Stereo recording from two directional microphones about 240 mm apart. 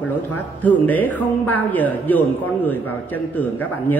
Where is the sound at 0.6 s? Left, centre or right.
Centre.